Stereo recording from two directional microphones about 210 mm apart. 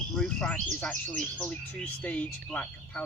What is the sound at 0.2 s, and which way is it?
Speech, 5° left (ahead or behind).